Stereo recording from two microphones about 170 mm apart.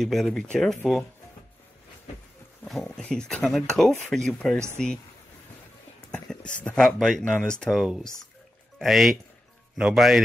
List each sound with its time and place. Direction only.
0.0 s speech: centre (ahead or behind)
2.6 s speech: centre (ahead or behind)
5.9 s a sound: 5° left (ahead or behind)
6.6 s speech: 5° left (ahead or behind)